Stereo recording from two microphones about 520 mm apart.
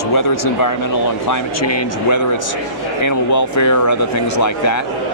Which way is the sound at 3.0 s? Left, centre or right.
Left.